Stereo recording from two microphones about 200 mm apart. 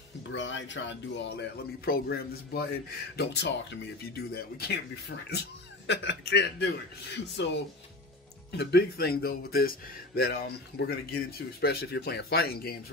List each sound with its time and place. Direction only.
0.3 s speech: 65° left (ahead or behind)
8.5 s speech: 55° left (ahead or behind)